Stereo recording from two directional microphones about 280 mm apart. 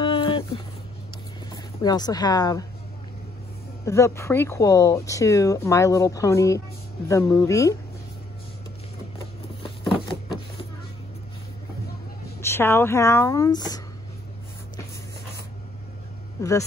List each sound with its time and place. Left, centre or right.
0.0 s a sound: centre
1.5 s speech: centre
3.8 s speech: centre
12.4 s speech: centre
16.3 s speech: centre